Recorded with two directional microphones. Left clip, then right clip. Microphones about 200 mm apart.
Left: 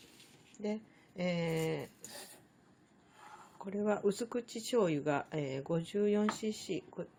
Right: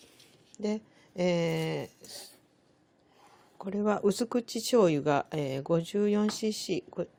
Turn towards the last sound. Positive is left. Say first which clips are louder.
# right 7 dB
turn(degrees=-45)  # may be behind; listen again after turning